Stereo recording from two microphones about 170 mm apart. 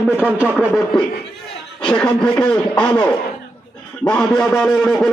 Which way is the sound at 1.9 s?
5° left (ahead or behind).